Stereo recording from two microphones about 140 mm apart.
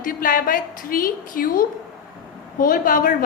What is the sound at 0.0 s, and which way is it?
A woman's voice, 85° left.